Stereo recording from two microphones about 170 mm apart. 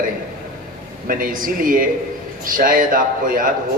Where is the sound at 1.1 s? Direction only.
55° right (ahead or behind).